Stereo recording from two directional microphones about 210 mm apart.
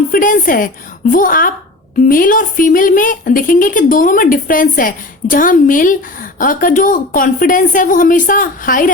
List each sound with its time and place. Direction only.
0.1 s a woman's voice: 40° left (ahead or behind)